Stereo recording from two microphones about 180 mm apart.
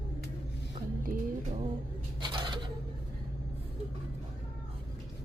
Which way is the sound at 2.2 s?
25° right (ahead or behind).